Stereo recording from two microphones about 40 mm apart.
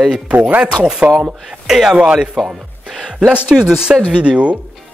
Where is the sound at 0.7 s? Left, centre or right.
Right.